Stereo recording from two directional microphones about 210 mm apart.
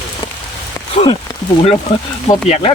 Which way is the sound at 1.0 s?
30° left (ahead or behind).